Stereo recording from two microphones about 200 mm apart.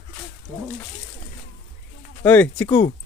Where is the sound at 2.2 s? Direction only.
10° left (ahead or behind).